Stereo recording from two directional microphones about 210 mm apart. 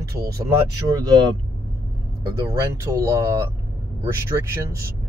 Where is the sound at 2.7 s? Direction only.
15° right (ahead or behind).